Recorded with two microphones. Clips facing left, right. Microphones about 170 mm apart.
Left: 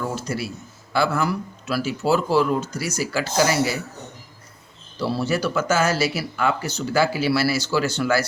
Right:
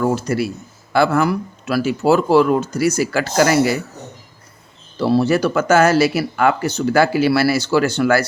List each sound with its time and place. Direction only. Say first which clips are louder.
0.0 s a man's voice: right 9 dB; 60° right (ahead or behind)
4.9 s speech: right 8 dB; 60° right (ahead or behind)